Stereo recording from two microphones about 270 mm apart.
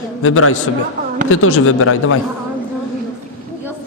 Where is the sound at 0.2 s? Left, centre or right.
Left.